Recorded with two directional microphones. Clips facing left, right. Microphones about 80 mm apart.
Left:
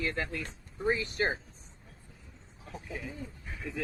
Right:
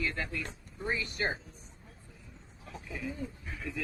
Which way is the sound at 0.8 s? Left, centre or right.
Left.